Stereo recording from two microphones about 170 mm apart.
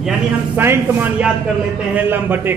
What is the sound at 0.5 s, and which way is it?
A man's voice, 10° right (ahead or behind).